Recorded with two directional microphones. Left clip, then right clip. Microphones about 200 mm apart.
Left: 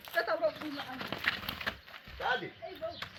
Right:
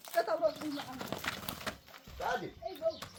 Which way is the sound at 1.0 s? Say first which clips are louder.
Left 5 dB; 20° right (ahead or behind).